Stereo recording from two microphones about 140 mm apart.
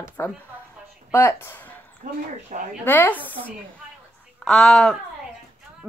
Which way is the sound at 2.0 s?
70° right (ahead or behind).